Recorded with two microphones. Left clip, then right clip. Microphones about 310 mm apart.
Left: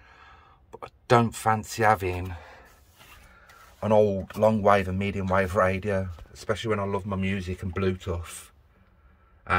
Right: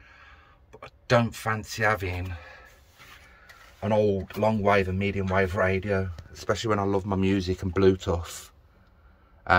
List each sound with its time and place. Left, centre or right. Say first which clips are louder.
0.0 s a sound: even; centre
3.8 s speech: left 2 dB; centre
6.3 s speech: right 2 dB; centre